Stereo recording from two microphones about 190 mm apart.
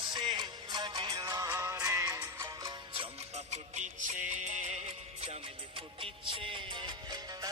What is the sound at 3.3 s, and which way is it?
Music, 40° right (ahead or behind).